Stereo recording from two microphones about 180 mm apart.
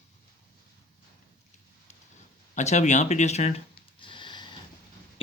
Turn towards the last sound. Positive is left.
turn(degrees=25)  # may be behind; listen again after turning